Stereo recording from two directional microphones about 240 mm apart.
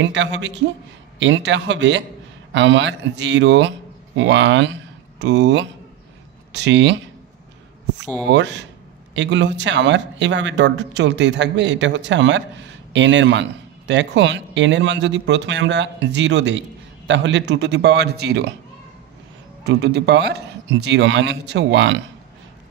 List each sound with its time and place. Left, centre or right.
0.0 s speech: right
8.3 s speech: right
19.6 s speech: right